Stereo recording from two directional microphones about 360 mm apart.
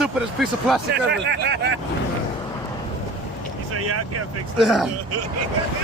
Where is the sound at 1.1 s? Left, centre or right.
Right.